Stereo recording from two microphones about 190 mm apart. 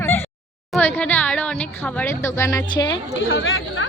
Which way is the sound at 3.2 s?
90° left.